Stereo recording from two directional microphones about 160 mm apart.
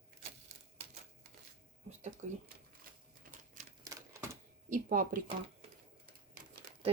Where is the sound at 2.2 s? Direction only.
50° right (ahead or behind).